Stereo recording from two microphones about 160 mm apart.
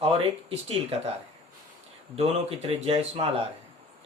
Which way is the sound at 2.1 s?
35° right (ahead or behind).